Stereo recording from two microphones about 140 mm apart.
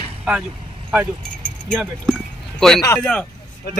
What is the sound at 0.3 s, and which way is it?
Speech, 5° right (ahead or behind).